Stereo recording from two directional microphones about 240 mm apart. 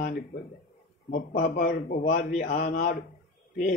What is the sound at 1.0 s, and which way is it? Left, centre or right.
A man's voice, left.